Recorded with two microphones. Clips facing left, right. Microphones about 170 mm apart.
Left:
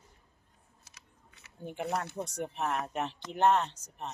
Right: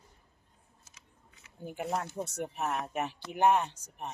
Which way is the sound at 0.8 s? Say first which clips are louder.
Left 1 dB; 75° left (ahead or behind).